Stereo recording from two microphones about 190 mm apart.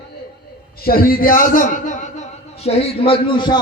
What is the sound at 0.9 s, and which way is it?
A man's voice, 50° left (ahead or behind).